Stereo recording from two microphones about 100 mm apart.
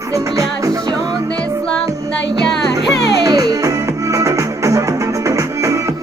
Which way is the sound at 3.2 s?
40° right (ahead or behind).